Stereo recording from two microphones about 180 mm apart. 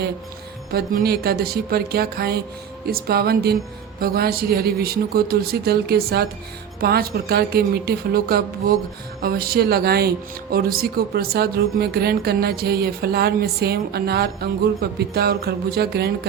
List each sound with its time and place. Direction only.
0.7 s speech: 60° right (ahead or behind)